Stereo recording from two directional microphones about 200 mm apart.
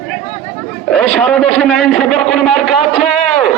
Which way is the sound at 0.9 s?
5° left (ahead or behind).